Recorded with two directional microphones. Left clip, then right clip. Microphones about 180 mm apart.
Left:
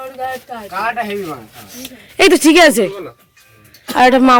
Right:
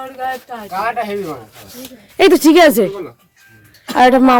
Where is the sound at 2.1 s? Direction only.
10° right (ahead or behind).